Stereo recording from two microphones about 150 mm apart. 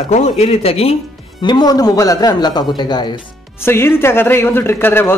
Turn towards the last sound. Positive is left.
turn(degrees=15)  # may be behind; listen again after turning